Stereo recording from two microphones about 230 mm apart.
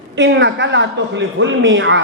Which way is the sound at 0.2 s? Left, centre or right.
Right.